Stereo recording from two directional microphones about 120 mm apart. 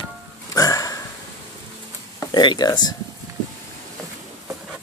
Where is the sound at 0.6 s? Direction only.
30° left (ahead or behind).